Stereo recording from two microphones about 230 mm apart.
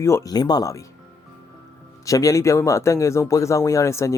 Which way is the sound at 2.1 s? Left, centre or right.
Centre.